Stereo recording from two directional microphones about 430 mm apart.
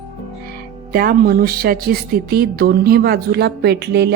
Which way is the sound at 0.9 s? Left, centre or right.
Centre.